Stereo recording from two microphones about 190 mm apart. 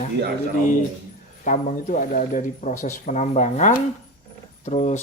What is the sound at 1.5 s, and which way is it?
Speech, 40° left (ahead or behind).